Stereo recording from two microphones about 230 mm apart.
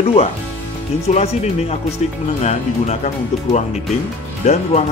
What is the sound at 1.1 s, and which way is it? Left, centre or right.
Speech, left.